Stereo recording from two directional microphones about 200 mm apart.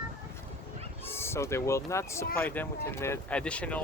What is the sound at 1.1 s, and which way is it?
Speech, 10° left (ahead or behind).